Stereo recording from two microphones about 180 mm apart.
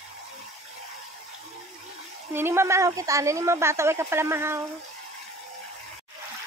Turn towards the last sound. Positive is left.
turn(degrees=-15)  # may be behind; listen again after turning